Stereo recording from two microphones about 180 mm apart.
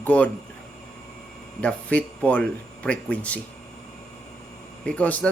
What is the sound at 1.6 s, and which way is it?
Speech, 5° left (ahead or behind).